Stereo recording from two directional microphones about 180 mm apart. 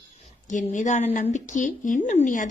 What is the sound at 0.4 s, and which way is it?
Speech, 45° left (ahead or behind).